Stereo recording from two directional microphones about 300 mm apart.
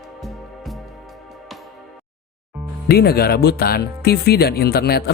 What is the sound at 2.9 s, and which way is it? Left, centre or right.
Speech, left.